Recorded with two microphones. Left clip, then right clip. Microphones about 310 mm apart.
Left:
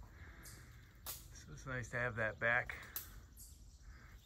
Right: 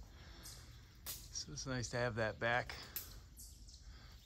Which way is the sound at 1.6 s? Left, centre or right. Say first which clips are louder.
Even; centre.